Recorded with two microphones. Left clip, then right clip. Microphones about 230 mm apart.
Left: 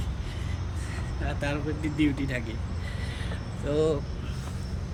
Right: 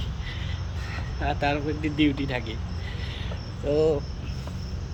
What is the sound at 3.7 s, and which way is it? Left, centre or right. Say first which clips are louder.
Speech: right 3 dB; centre.